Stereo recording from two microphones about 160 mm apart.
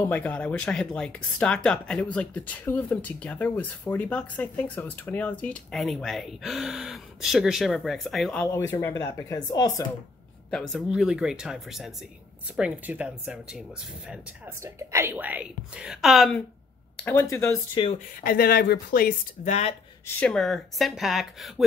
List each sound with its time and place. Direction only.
0.0 s speech: 10° left (ahead or behind)
8.5 s speech: 15° left (ahead or behind)
10.5 s speech: centre (ahead or behind)
14.6 s speech: 20° right (ahead or behind); by 16.4 s centre (ahead or behind)
17.0 s speech: 15° left (ahead or behind)
17.9 s speech: 65° left (ahead or behind)
20.2 s speech: 5° left (ahead or behind)